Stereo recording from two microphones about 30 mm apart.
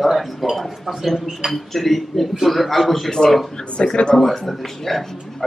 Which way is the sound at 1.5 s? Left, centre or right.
Centre.